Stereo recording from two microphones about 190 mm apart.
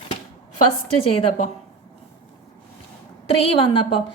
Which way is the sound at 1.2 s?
40° left (ahead or behind).